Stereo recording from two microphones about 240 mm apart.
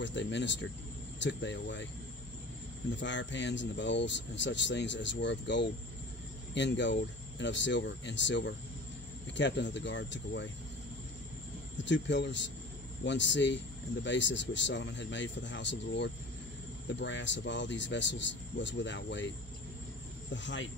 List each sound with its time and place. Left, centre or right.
0.0 s speech: left
3.0 s speech: left
11.8 s speech: left
20.3 s speech: left